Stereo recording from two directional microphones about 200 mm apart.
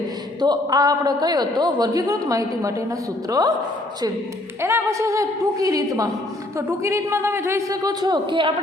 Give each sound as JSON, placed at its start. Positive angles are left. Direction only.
{"t": 0.3, "sound": "a man's voice", "side_deg": -20}
{"t": 4.6, "sound": "a man's voice", "side_deg": -15}